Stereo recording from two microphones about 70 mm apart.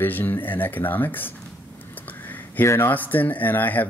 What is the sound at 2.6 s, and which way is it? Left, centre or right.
Speech, left.